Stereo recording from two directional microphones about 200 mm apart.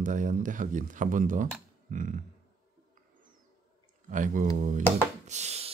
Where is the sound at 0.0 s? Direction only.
40° right (ahead or behind).